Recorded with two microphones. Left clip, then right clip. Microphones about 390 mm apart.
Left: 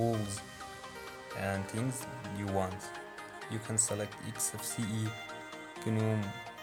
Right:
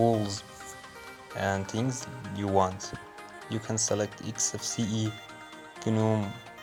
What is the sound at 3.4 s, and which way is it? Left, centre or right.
Speech, left.